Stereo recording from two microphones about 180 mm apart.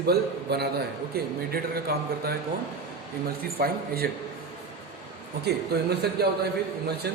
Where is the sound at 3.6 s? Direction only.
55° right (ahead or behind).